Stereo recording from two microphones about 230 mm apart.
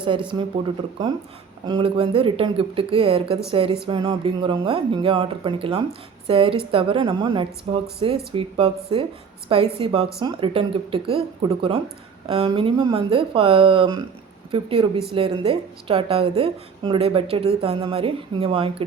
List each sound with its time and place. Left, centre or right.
1.6 s a woman's voice: right